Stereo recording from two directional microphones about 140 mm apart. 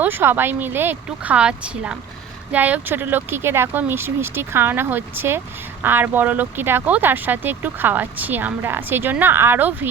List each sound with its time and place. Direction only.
0.0 s speech: 15° right (ahead or behind)